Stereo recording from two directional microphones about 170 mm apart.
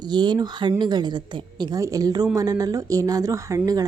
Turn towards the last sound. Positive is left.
turn(degrees=-20)  # may be behind; listen again after turning